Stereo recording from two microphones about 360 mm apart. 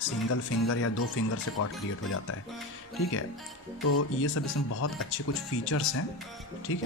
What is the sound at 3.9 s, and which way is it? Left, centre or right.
Speech, left.